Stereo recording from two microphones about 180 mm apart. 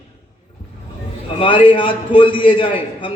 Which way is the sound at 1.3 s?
25° left (ahead or behind).